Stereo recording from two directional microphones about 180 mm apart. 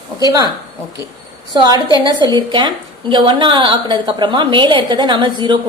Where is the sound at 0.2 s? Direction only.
20° right (ahead or behind).